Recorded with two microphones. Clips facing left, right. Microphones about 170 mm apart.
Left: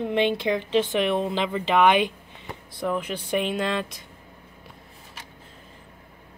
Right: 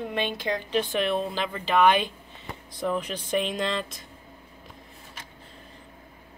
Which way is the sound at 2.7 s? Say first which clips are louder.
Left 1 dB; 10° left (ahead or behind).